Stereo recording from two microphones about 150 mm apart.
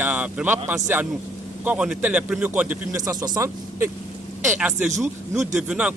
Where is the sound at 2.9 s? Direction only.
25° right (ahead or behind).